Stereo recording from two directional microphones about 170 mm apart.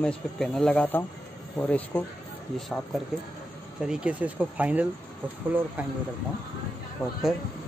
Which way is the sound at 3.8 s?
5° right (ahead or behind).